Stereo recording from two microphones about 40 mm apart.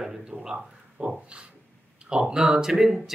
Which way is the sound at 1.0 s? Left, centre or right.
Right.